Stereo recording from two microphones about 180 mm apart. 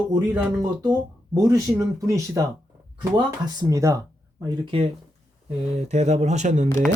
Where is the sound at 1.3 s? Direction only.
20° right (ahead or behind).